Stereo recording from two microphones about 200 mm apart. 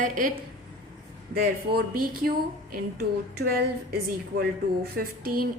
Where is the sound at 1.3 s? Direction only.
50° right (ahead or behind).